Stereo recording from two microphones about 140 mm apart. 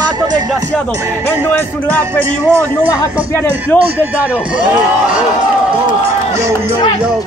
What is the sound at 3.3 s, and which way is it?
Speech, 15° left (ahead or behind).